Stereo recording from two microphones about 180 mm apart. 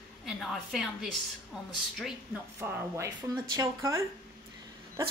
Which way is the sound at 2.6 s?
10° right (ahead or behind).